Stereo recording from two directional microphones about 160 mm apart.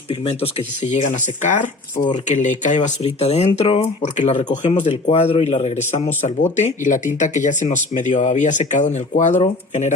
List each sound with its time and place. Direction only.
0.1 s speech: 35° left (ahead or behind)
0.9 s speech: 50° left (ahead or behind)
4.4 s speech: 35° left (ahead or behind)